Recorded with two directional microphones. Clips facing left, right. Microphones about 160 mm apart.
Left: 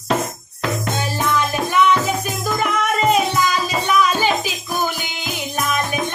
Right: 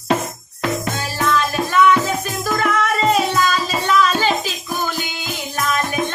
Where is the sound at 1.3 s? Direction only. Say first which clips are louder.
Right 2 dB; 15° left (ahead or behind).